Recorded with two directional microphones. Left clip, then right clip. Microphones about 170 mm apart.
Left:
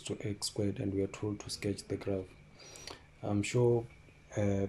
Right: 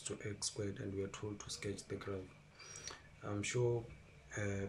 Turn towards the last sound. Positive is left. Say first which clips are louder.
# left 9 dB
turn(degrees=30)  # may be behind; listen again after turning